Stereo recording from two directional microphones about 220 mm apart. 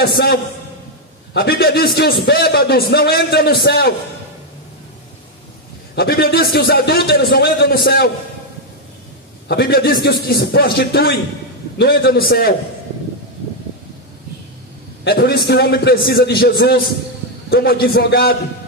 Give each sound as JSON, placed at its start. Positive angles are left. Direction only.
{"t": 0.0, "sound": "a man's voice", "side_deg": 45}
{"t": 5.9, "sound": "a man's voice", "side_deg": 45}
{"t": 9.5, "sound": "a man's voice", "side_deg": 45}
{"t": 15.0, "sound": "a man's voice", "side_deg": 45}